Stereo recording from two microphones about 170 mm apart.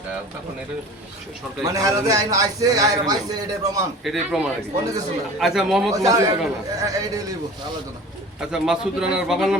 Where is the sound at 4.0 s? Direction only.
Centre (ahead or behind).